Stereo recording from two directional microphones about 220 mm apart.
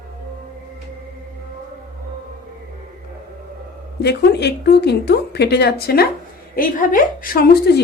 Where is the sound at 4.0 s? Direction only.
50° left (ahead or behind).